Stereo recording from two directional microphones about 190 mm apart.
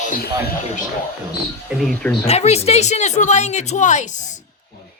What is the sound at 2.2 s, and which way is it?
A woman's voice, 35° left (ahead or behind).